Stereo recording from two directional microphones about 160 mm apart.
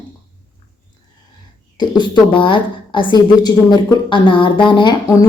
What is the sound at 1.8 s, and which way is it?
A woman's voice, 30° left (ahead or behind).